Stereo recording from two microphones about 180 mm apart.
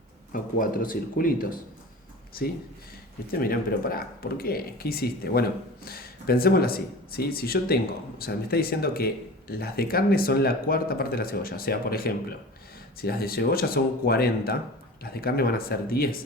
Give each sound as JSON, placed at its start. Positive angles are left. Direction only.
{"t": 0.3, "sound": "speech", "side_deg": 50}
{"t": 3.3, "sound": "speech", "side_deg": 55}